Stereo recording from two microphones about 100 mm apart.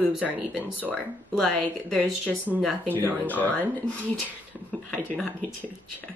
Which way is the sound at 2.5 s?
5° right (ahead or behind).